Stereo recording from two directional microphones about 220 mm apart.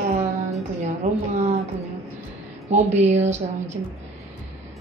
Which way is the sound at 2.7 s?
30° right (ahead or behind).